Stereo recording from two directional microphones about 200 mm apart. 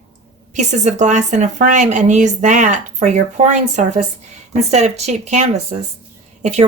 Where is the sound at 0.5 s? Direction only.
35° right (ahead or behind).